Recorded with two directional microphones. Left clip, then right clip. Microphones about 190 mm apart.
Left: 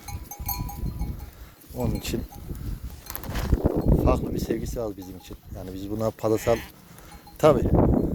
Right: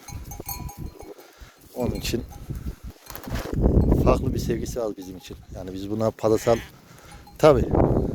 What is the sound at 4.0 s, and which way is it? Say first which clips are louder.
Speech: right 3 dB; 50° right (ahead or behind).